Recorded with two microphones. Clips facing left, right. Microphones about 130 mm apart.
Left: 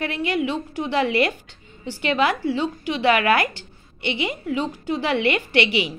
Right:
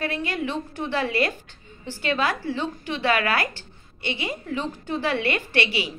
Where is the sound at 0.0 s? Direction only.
40° right (ahead or behind).